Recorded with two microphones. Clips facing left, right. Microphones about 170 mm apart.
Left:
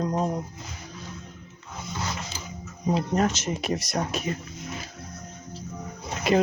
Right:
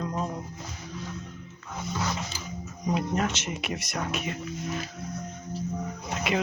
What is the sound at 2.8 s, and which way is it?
Speech, 35° left (ahead or behind).